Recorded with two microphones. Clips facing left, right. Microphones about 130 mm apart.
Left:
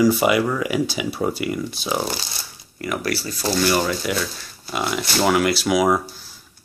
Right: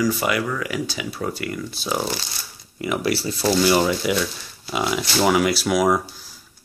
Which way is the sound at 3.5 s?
15° right (ahead or behind).